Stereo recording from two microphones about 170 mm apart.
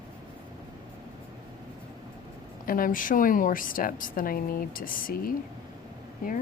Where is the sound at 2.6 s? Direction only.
55° left (ahead or behind).